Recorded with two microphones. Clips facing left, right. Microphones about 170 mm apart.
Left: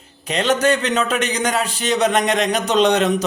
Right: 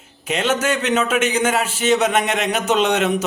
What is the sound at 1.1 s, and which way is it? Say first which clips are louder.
Speech: right 2 dB; 35° left (ahead or behind).